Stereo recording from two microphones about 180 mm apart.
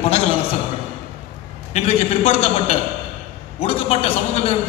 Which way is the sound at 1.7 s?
35° left (ahead or behind).